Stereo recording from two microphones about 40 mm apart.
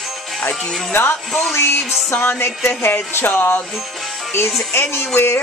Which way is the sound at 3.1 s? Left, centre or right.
Left.